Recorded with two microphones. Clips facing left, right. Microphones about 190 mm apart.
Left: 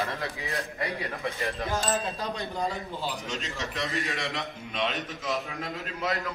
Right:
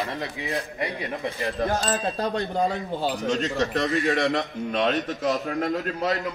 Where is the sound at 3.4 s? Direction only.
40° right (ahead or behind).